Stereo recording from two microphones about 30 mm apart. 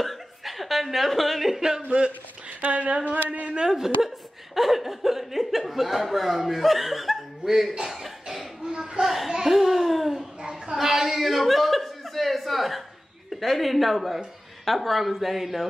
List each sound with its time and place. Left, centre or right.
0.0 s a sound: centre
1.9 s speech: right
2.6 s speech: right
3.7 s a woman's voice: centre
7.9 s cough: centre
8.6 s a sound: right
9.0 s speech: centre
10.4 s a sound: right
10.9 s speech: centre